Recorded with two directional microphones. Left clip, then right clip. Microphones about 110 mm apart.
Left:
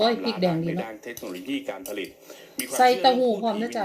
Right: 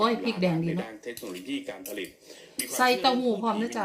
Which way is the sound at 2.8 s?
20° right (ahead or behind).